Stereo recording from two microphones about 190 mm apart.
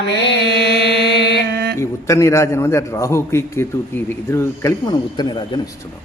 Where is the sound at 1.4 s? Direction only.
60° right (ahead or behind).